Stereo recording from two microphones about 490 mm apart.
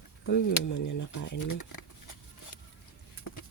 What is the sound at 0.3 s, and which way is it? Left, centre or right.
Speech, left.